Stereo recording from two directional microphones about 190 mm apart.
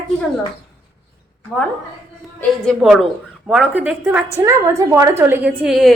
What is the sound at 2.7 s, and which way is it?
A woman's voice, centre (ahead or behind).